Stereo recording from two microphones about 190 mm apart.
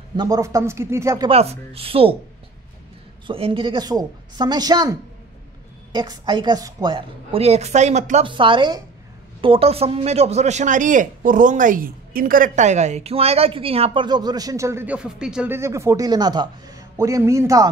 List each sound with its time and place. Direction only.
0.1 s speech: 20° right (ahead or behind)
1.3 s speech: 30° right (ahead or behind)
3.3 s a man's voice: 30° right (ahead or behind)
5.9 s a man's voice: 25° right (ahead or behind)
8.3 s a man's voice: 25° right (ahead or behind)